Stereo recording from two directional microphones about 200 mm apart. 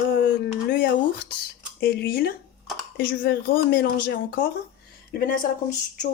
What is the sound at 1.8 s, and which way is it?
Speech, 50° left (ahead or behind).